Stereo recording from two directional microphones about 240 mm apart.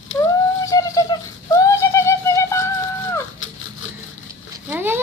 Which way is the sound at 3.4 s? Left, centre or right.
Left.